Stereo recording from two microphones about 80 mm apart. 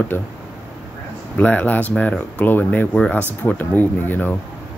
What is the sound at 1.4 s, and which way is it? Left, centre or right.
Speech, centre.